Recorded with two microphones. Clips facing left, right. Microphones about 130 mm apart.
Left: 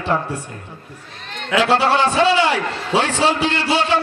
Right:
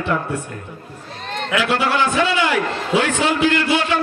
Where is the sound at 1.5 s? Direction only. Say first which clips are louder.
Left 4 dB; 30° left (ahead or behind).